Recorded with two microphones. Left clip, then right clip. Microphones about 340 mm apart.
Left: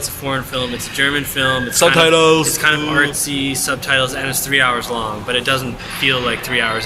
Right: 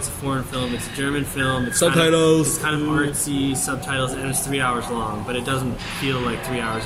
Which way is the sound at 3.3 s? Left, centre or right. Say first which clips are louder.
Left 5 dB; centre.